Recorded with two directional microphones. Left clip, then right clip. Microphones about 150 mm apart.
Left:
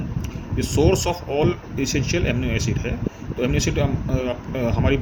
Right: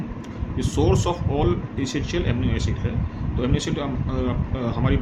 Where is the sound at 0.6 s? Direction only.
15° left (ahead or behind).